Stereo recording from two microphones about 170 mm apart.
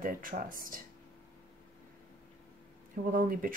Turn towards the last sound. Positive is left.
turn(degrees=-55)  # may be behind; listen again after turning